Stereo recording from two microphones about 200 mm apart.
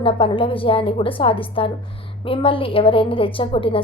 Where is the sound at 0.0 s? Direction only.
25° left (ahead or behind).